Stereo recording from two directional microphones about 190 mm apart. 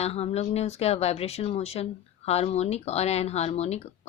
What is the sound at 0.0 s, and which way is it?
Speech, 35° left (ahead or behind).